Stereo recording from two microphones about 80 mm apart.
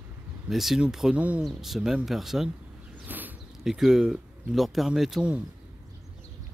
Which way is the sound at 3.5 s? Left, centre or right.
Centre.